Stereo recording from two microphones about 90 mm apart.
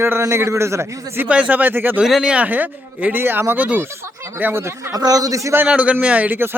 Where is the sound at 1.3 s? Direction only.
15° right (ahead or behind).